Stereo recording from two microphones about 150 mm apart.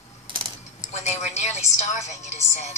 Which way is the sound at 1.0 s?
50° left (ahead or behind).